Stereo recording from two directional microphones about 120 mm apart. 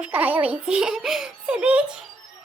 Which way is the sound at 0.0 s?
15° right (ahead or behind).